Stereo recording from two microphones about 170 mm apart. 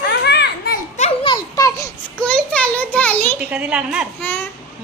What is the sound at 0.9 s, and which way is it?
Speech, 40° left (ahead or behind).